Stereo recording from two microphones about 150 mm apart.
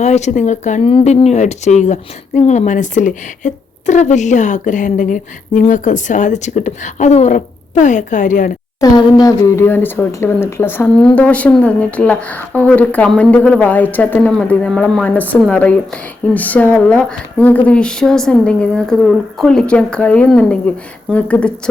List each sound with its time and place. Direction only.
0.0 s speech: 50° left (ahead or behind)
8.8 s speech: 25° left (ahead or behind); by 21.5 s 10° left (ahead or behind)